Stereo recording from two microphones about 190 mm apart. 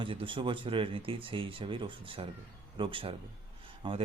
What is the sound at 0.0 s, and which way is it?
Speech, 25° right (ahead or behind).